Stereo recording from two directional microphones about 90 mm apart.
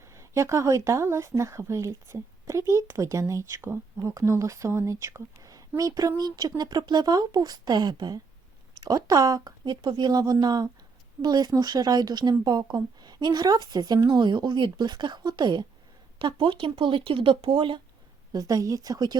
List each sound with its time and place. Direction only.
0.0 s a woman's voice: 35° right (ahead or behind); by 15.6 s 55° right (ahead or behind)
16.1 s speech: 65° right (ahead or behind)
18.3 s speech: 45° right (ahead or behind)